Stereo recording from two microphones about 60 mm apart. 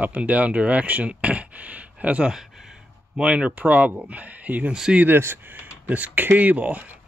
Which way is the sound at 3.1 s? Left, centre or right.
Centre.